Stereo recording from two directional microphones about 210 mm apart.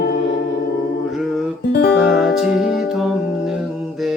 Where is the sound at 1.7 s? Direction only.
50° left (ahead or behind).